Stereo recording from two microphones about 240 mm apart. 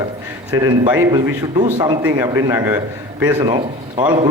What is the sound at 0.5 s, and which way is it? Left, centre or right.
Speech, centre.